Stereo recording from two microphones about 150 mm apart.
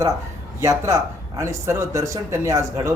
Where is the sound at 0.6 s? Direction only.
20° right (ahead or behind).